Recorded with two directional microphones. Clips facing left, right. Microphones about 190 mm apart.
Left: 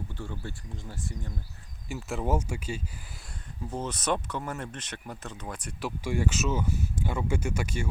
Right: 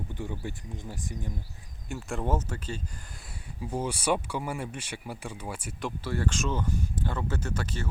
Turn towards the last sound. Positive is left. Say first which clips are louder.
# left 2 dB
turn(degrees=10)  # may be behind; listen again after turning